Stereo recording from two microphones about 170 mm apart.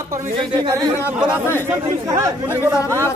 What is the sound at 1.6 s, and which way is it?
Speech, 20° right (ahead or behind).